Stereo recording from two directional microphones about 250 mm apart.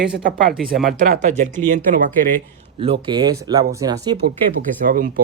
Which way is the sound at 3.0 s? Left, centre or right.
Centre.